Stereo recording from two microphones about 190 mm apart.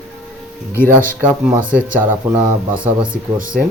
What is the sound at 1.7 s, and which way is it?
Speech, 10° right (ahead or behind).